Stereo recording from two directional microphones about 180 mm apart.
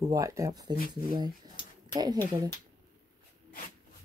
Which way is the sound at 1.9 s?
20° right (ahead or behind).